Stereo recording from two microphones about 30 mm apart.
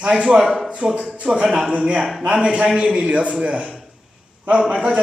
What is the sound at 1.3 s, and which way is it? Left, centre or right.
Speech, right.